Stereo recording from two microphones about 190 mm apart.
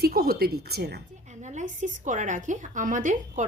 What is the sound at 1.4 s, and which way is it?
A woman's voice, 40° right (ahead or behind).